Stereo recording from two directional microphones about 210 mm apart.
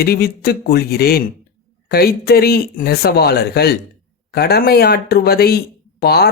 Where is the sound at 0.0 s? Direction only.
50° left (ahead or behind).